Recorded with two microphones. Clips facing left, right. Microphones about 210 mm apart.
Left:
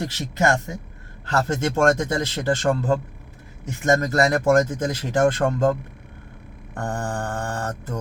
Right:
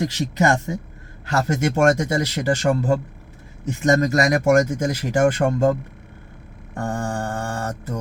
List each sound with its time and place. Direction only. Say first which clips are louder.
0.0 s a man's voice: right 3 dB; 20° right (ahead or behind)
4.1 s a man's voice: right 1 dB; 15° right (ahead or behind)
6.7 s mantra: right 2 dB; 10° right (ahead or behind)